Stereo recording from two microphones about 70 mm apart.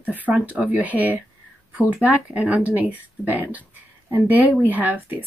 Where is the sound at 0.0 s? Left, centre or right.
Right.